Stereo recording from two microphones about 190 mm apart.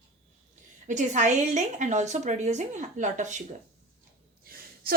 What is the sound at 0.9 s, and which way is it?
A woman's voice, 40° right (ahead or behind).